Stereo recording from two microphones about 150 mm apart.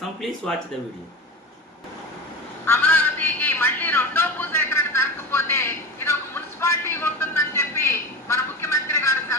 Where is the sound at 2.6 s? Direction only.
15° left (ahead or behind).